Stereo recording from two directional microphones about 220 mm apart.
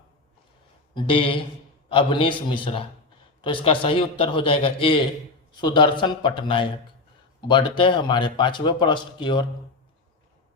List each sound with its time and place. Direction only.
0.9 s a man's voice: 25° left (ahead or behind)